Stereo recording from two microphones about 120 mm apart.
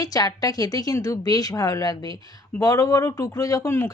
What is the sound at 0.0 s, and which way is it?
A woman's voice, 30° left (ahead or behind).